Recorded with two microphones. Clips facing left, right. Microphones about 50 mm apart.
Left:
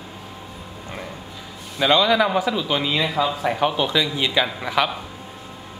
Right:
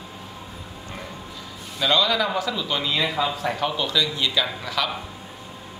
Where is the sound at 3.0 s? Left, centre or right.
Centre.